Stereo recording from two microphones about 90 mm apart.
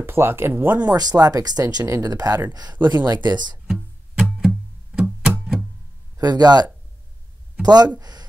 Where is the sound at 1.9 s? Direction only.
35° right (ahead or behind).